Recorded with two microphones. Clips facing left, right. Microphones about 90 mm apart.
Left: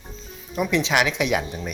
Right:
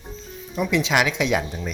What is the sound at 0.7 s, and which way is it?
Speech, 20° left (ahead or behind).